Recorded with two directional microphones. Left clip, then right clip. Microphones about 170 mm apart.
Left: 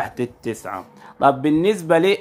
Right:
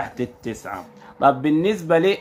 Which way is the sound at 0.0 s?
40° left (ahead or behind).